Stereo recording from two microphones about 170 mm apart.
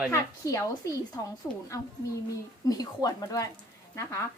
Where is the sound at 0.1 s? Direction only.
20° left (ahead or behind).